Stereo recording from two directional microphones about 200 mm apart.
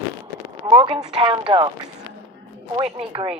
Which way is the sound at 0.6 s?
25° right (ahead or behind).